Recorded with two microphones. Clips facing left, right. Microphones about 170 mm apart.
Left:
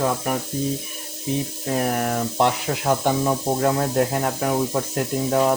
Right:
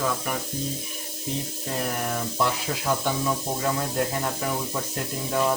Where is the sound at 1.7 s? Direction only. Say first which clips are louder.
Left 6 dB; 55° left (ahead or behind).